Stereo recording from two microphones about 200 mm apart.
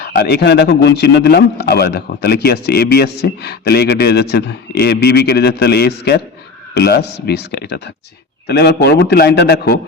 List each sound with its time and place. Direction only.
0.0 s a man's voice: 50° left (ahead or behind)